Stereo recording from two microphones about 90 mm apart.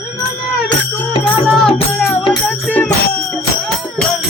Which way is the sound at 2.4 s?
20° left (ahead or behind).